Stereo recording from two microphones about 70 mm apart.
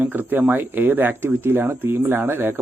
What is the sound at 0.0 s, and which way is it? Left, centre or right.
Speech, right.